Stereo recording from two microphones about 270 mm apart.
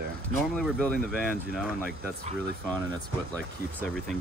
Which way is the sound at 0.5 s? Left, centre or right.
Centre.